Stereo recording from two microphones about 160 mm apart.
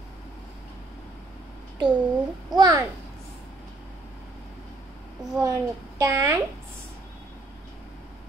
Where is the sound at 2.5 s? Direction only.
25° right (ahead or behind).